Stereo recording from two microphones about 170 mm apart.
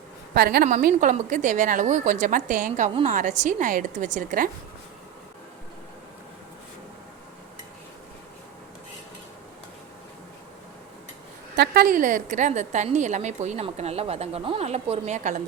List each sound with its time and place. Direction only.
0.3 s a woman's voice: 60° right (ahead or behind)
11.5 s a woman's voice: 70° right (ahead or behind); by 15.4 s 45° right (ahead or behind)